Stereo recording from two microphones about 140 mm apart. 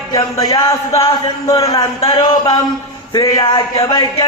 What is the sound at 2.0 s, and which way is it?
Speech, 30° left (ahead or behind).